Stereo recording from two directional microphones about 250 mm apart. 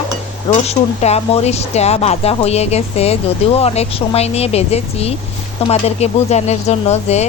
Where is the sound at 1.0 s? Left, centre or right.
Left.